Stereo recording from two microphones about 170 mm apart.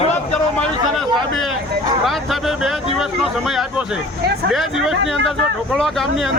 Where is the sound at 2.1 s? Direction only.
Centre (ahead or behind).